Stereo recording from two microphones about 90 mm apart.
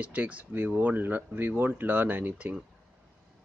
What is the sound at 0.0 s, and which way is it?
Speech, 15° right (ahead or behind).